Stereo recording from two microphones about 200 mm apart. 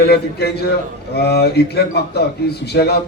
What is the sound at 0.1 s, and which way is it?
A man's voice, 55° left (ahead or behind).